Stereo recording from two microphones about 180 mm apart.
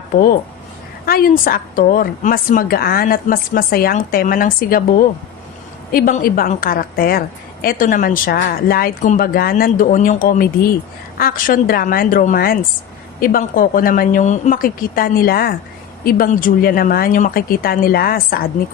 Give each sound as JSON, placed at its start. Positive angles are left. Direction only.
{"t": 1.0, "sound": "a woman's voice", "side_deg": 55}